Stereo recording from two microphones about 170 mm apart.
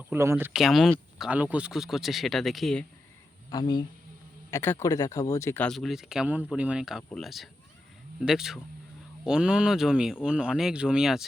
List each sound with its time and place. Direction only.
0.0 s speech: 15° right (ahead or behind)
0.6 s speech: centre (ahead or behind)
3.5 s speech: 25° left (ahead or behind)
4.5 s speech: 15° left (ahead or behind)
5.6 s speech: centre (ahead or behind)